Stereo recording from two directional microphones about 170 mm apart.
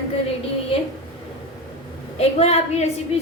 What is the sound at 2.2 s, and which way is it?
Speech, 40° left (ahead or behind).